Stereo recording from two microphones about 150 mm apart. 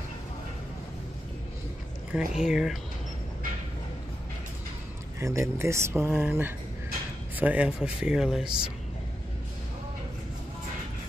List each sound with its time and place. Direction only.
2.1 s speech: 5° right (ahead or behind)
5.2 s speech: 20° right (ahead or behind); by 8.5 s centre (ahead or behind)